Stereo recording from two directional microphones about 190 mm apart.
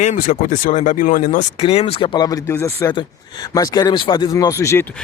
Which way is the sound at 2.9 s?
20° left (ahead or behind).